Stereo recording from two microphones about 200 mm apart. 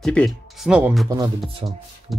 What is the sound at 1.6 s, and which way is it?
Speech, 25° right (ahead or behind).